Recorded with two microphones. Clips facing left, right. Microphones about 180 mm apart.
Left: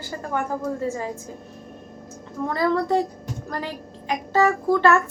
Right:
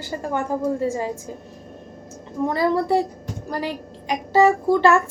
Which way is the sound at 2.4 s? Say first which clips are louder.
Right 2 dB; 15° right (ahead or behind).